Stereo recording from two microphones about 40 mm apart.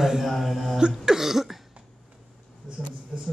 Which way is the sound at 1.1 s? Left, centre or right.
Centre.